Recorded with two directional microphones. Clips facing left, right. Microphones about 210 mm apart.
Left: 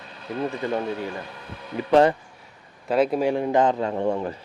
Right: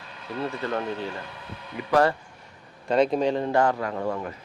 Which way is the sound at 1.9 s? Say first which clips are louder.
Left 4 dB; 20° left (ahead or behind).